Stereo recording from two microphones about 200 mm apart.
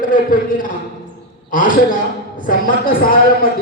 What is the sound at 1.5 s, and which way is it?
A man's voice, 40° left (ahead or behind).